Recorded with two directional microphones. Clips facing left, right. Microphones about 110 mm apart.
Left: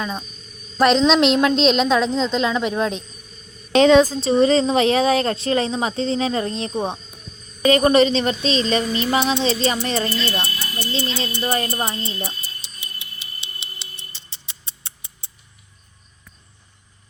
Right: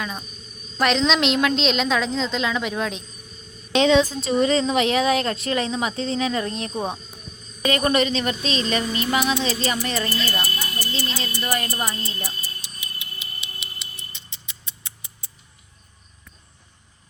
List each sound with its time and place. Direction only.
0.8 s a woman's voice: 35° left (ahead or behind)
12.6 s music: 30° left (ahead or behind)